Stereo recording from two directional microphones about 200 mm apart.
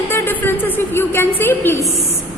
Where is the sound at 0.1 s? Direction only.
10° left (ahead or behind).